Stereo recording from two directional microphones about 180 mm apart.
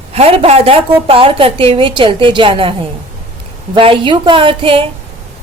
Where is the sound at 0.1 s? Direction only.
35° right (ahead or behind).